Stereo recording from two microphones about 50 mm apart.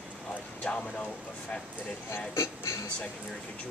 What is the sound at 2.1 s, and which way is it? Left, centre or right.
Speech, left.